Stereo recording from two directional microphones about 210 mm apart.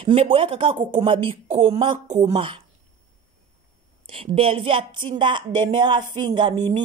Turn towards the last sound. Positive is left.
turn(degrees=-20)  # may be behind; listen again after turning